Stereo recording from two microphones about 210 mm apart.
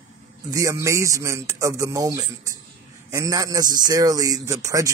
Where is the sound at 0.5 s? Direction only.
15° right (ahead or behind).